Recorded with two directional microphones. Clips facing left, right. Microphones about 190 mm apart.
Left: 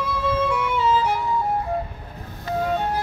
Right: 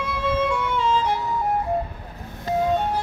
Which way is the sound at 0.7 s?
5° left (ahead or behind).